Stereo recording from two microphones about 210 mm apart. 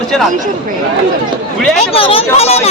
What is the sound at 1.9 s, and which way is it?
Speech, 25° left (ahead or behind).